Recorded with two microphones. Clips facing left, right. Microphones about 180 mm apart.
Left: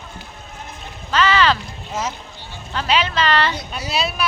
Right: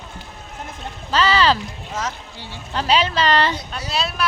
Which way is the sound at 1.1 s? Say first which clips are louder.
Even; 35° right (ahead or behind).